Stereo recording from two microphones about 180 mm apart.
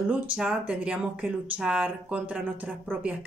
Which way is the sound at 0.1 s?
5° right (ahead or behind).